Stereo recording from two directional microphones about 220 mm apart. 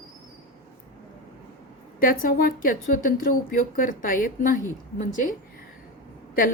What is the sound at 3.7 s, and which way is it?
A woman's voice, 40° left (ahead or behind).